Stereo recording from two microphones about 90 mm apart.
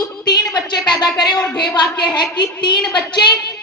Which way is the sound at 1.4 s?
5° left (ahead or behind).